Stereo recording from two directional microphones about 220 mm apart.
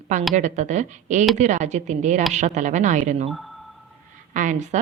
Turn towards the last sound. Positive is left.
turn(degrees=-35)  # may be behind; listen again after turning